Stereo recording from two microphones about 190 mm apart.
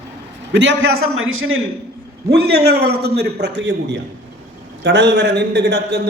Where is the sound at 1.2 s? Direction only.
90° right.